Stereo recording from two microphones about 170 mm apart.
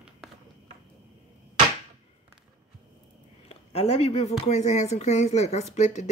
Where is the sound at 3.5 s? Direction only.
40° left (ahead or behind).